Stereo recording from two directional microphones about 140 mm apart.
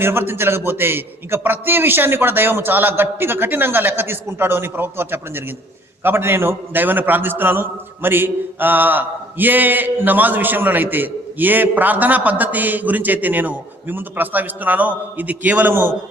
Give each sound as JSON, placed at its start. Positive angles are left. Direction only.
{"t": 0.0, "sound": "a man's voice", "side_deg": -15}